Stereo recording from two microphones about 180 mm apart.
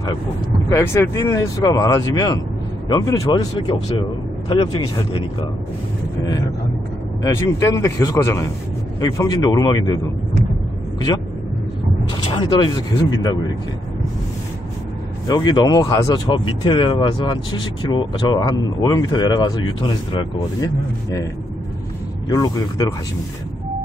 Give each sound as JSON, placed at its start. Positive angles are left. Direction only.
{"t": 0.7, "sound": "a man's voice", "side_deg": 15}
{"t": 7.3, "sound": "a man's voice", "side_deg": 15}
{"t": 12.1, "sound": "speech", "side_deg": 30}
{"t": 15.2, "sound": "speech", "side_deg": 20}
{"t": 22.3, "sound": "speech", "side_deg": 20}